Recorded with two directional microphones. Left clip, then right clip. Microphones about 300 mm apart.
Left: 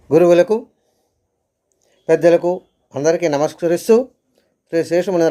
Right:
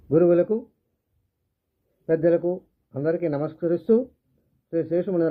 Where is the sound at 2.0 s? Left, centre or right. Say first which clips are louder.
Left 8 dB; centre.